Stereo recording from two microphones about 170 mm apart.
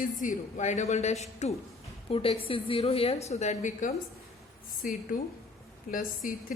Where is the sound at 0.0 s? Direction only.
50° left (ahead or behind).